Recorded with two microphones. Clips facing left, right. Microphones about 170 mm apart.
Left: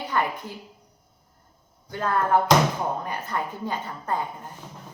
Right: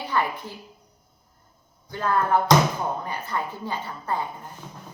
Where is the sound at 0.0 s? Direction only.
45° left (ahead or behind).